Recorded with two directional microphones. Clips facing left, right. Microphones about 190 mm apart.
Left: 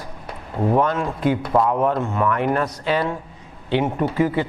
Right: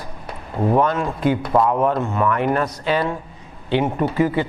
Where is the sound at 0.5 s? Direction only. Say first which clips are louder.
Right 1 dB; 25° right (ahead or behind).